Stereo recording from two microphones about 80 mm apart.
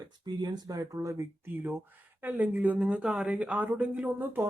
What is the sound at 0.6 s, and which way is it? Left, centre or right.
Speech, right.